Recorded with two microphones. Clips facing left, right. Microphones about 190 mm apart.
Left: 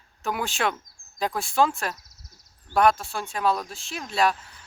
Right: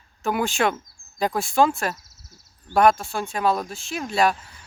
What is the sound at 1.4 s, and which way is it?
Speech, centre (ahead or behind).